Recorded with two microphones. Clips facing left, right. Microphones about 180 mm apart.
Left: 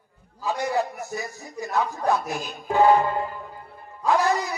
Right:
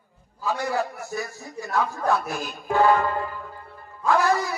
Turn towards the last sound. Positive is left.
turn(degrees=15)  # may be behind; listen again after turning